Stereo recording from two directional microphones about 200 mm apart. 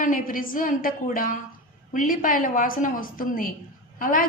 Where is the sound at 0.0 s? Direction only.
45° left (ahead or behind).